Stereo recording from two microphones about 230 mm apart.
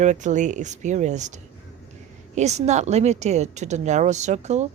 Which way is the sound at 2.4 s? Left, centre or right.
Right.